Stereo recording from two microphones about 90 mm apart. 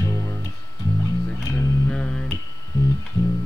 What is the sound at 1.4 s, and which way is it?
Music, 35° left (ahead or behind).